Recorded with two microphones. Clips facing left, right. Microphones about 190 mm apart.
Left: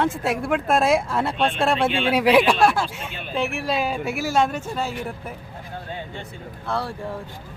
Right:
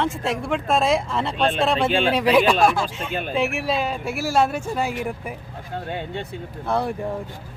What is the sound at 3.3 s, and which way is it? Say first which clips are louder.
A man's voice: even; centre (ahead or behind).